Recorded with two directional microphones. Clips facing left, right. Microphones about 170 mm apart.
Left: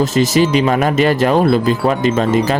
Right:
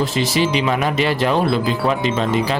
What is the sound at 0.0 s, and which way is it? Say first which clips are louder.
Speech: left 5 dB; 45° left (ahead or behind).